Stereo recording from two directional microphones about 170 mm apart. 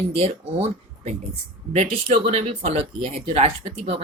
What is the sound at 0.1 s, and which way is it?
Speech, 35° right (ahead or behind).